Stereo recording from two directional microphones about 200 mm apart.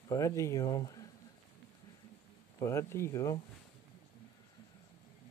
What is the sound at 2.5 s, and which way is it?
Speech, 15° left (ahead or behind).